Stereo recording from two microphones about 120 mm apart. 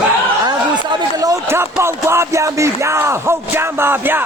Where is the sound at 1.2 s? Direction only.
25° right (ahead or behind).